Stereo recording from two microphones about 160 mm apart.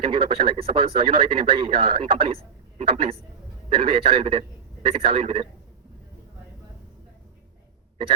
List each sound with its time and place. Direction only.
0.0 s speech: 30° right (ahead or behind)